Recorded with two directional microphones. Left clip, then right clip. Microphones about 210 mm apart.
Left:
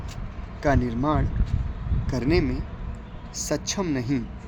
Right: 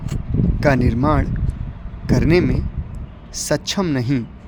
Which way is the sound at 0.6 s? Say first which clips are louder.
Right 6 dB; 45° right (ahead or behind).